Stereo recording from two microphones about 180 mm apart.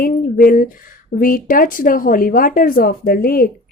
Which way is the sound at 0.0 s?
50° left (ahead or behind).